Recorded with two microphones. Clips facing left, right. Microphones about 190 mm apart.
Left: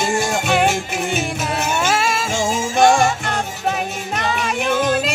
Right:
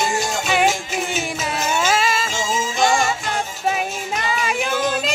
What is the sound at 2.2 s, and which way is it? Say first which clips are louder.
Music: left 3 dB; 60° left (ahead or behind).